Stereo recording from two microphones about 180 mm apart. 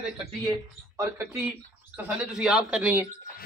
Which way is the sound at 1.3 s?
Centre (ahead or behind).